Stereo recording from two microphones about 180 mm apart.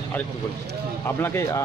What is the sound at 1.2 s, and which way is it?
Speech, 15° left (ahead or behind).